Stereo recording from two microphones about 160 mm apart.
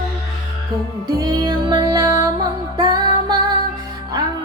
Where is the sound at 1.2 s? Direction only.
25° right (ahead or behind).